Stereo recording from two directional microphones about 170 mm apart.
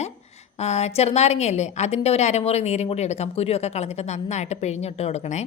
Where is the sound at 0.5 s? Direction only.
40° left (ahead or behind).